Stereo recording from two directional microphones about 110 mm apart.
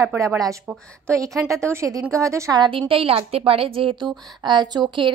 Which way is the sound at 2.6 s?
50° right (ahead or behind).